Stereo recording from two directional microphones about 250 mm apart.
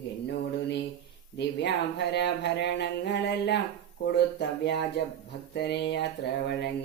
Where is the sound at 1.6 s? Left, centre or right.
Left.